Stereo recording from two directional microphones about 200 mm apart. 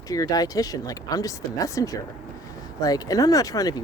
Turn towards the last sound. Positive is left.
turn(degrees=20)  # may be behind; listen again after turning